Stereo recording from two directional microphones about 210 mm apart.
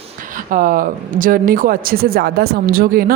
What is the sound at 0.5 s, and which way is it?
A woman's voice, 40° right (ahead or behind).